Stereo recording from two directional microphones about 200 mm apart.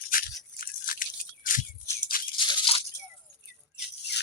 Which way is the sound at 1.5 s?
40° left (ahead or behind).